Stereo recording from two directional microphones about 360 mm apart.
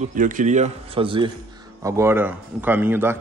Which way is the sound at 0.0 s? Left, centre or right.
Right.